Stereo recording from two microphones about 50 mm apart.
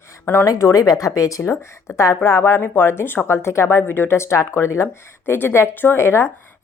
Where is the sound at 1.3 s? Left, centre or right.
Left.